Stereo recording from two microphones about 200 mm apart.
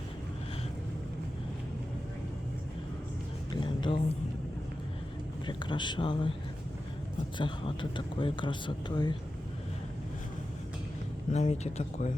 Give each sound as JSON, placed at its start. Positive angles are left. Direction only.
{"t": 3.5, "sound": "music", "side_deg": 25}
{"t": 5.5, "sound": "speech", "side_deg": 20}
{"t": 7.3, "sound": "speech", "side_deg": 25}
{"t": 11.3, "sound": "speech", "side_deg": 35}